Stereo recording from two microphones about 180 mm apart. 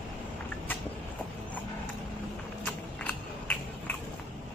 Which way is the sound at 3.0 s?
10° left (ahead or behind).